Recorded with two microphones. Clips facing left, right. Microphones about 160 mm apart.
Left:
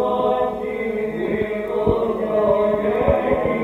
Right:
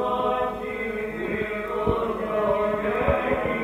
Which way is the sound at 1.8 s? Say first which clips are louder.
Left 6 dB; 25° left (ahead or behind).